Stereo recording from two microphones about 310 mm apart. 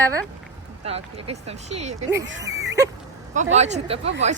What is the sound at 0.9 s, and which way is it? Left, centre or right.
Speech, centre.